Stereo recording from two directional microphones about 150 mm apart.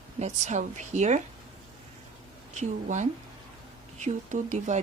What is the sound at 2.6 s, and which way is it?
A woman's voice, 55° right (ahead or behind).